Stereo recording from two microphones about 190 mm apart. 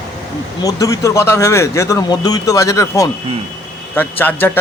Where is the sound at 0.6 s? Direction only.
20° left (ahead or behind).